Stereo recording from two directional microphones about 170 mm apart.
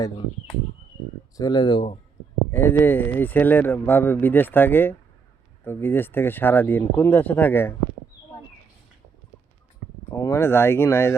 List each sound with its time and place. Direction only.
1.4 s speech: 25° left (ahead or behind)
2.5 s speech: 15° left (ahead or behind)
10.1 s speech: 15° left (ahead or behind)